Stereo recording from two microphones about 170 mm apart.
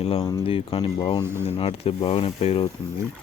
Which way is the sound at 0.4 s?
35° left (ahead or behind).